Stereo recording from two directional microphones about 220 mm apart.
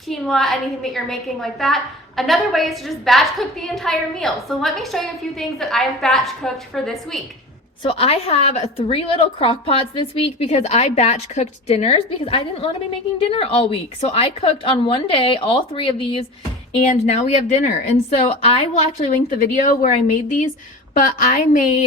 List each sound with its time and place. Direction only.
0.1 s a woman's voice: centre (ahead or behind)
7.9 s a woman's voice: 25° left (ahead or behind)